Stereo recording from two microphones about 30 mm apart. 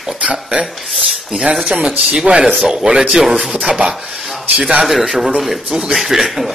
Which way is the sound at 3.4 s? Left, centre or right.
Centre.